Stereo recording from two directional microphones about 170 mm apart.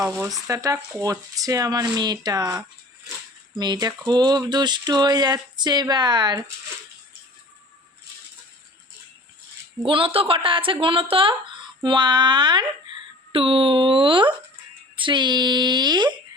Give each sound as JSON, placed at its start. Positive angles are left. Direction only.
{"t": 0.3, "sound": "speech", "side_deg": -20}
{"t": 9.8, "sound": "speech", "side_deg": -30}